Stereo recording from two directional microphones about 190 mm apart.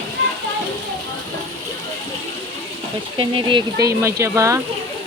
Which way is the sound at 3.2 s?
25° right (ahead or behind).